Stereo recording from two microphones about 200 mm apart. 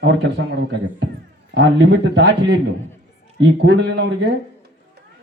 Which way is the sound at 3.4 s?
65° right (ahead or behind).